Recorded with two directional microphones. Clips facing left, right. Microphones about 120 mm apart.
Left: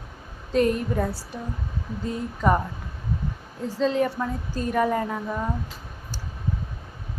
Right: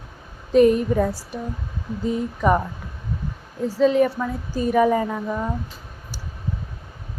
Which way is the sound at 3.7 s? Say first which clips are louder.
Right 5 dB; 10° right (ahead or behind).